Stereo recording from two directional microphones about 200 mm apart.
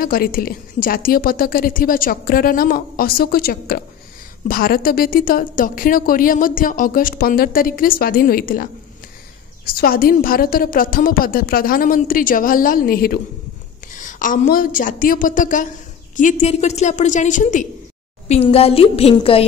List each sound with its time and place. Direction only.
0.0 s a woman's voice: 45° left (ahead or behind)
9.7 s a woman's voice: 45° left (ahead or behind); by 19.4 s 30° left (ahead or behind)